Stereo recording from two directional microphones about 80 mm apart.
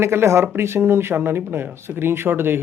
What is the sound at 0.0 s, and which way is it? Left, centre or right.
Speech, right.